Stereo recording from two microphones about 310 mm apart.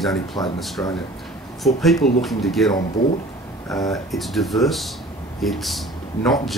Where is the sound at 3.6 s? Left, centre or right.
Centre.